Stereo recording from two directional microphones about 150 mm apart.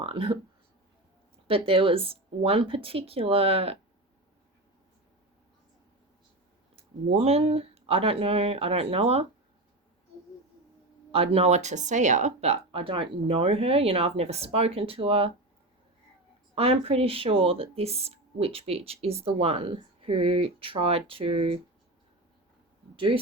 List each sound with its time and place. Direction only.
0.0 s speech: 40° right (ahead or behind)
1.5 s speech: 40° right (ahead or behind)
6.7 s speech: 45° right (ahead or behind)
11.1 s speech: 40° right (ahead or behind)
16.6 s speech: 40° right (ahead or behind)
23.0 s speech: 35° right (ahead or behind)